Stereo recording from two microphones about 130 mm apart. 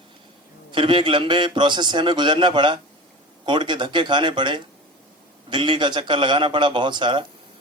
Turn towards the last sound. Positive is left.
turn(degrees=-40)  # may be behind; listen again after turning